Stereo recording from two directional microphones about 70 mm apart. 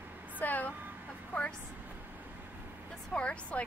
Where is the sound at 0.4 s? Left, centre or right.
Left.